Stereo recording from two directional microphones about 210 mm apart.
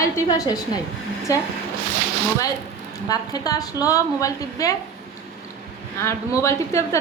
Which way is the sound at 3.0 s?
15° left (ahead or behind).